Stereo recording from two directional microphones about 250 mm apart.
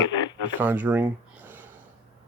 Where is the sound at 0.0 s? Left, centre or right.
Centre.